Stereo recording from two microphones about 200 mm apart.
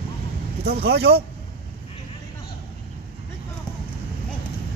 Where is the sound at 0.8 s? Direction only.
55° right (ahead or behind).